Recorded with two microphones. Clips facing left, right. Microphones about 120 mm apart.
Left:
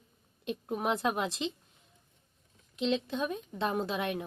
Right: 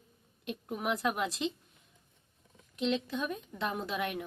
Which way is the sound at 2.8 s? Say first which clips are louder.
Left 1 dB; 25° left (ahead or behind).